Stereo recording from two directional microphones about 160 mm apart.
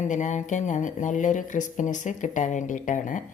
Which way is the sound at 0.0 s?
50° left (ahead or behind).